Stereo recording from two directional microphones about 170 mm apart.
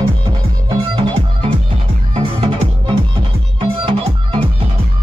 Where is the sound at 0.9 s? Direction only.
30° right (ahead or behind).